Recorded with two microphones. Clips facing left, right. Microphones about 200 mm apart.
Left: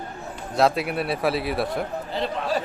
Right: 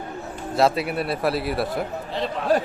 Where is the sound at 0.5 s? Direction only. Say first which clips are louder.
Right 1 dB; centre (ahead or behind).